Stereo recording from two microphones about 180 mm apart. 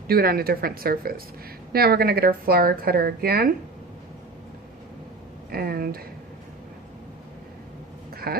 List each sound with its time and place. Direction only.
0.1 s a woman's voice: 55° right (ahead or behind)
5.5 s a woman's voice: 55° right (ahead or behind)
8.1 s a sound: 55° right (ahead or behind)